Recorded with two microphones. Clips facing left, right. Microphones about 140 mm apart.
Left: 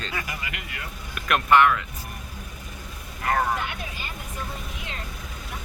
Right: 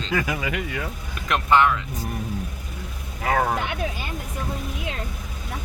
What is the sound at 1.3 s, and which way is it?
Speech, 25° right (ahead or behind).